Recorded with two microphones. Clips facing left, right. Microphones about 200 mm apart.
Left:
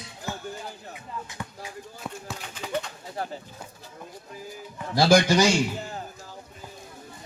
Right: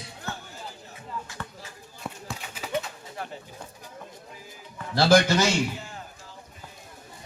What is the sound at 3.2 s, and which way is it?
Pigeon, 35° left (ahead or behind).